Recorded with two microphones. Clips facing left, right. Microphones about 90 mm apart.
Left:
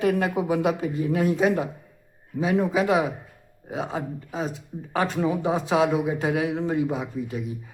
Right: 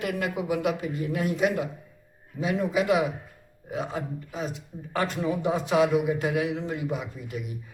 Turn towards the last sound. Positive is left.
turn(degrees=30)  # may be behind; listen again after turning